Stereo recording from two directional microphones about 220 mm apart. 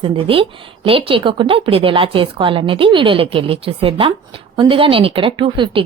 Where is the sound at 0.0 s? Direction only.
25° right (ahead or behind).